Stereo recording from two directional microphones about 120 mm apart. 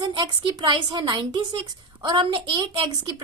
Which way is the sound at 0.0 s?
40° right (ahead or behind).